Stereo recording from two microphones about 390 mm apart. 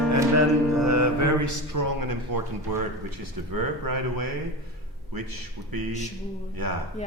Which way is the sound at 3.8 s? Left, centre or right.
Right.